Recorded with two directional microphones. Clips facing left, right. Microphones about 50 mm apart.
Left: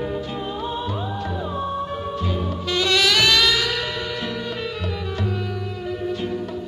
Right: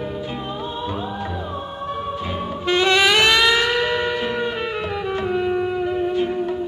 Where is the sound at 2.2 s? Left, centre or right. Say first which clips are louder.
Even; right.